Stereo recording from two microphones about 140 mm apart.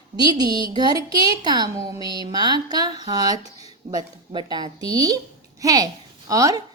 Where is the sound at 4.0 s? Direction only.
30° right (ahead or behind).